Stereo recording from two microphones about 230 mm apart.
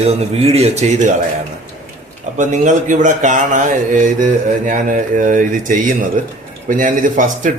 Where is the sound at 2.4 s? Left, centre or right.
Right.